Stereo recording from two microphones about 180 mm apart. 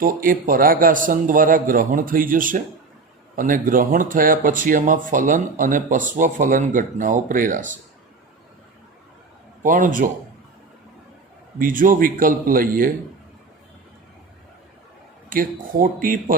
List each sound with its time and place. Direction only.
0.0 s speech: 50° right (ahead or behind)
9.6 s speech: 45° right (ahead or behind)
11.6 s speech: 50° right (ahead or behind)
15.3 s speech: 50° right (ahead or behind)